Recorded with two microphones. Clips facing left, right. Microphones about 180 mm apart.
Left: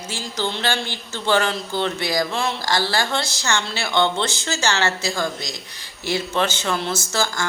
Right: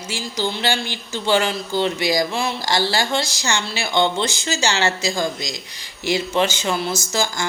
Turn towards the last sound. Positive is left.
turn(degrees=-15)  # may be behind; listen again after turning